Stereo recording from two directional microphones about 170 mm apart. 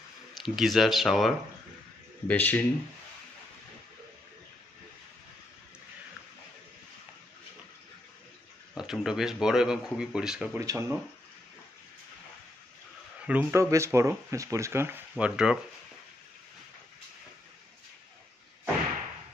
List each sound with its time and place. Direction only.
0.3 s speech: centre (ahead or behind)
2.2 s speech: 10° left (ahead or behind)
8.7 s speech: 5° right (ahead or behind)
10.6 s speech: 20° right (ahead or behind)
13.2 s speech: 10° right (ahead or behind)